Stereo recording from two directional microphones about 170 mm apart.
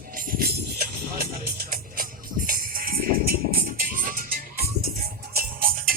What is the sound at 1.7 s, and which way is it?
Music, 55° right (ahead or behind).